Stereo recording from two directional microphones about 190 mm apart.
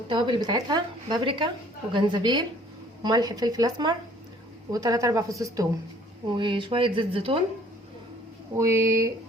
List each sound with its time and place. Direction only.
0.1 s a woman's voice: 25° right (ahead or behind)
8.5 s a woman's voice: 15° right (ahead or behind)